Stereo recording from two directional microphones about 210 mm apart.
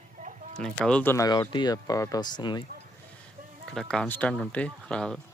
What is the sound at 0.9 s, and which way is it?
Speech, 10° left (ahead or behind).